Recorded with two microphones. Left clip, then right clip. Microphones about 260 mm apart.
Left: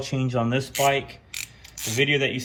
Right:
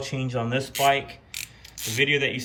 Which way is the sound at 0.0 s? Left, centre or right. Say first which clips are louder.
Left 3 dB; centre.